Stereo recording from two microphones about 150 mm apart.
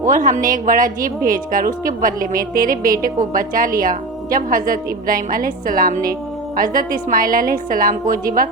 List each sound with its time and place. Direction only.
0.1 s a woman's voice: 60° right (ahead or behind)